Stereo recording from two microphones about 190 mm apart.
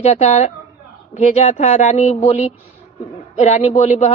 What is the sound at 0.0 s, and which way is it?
Speech, 35° left (ahead or behind).